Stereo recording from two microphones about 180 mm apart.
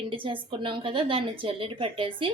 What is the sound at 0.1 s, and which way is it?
A woman's voice, 30° right (ahead or behind).